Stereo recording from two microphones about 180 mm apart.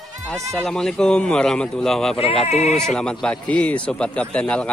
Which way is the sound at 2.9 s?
5° left (ahead or behind).